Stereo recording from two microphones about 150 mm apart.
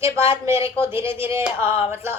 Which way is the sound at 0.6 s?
35° left (ahead or behind).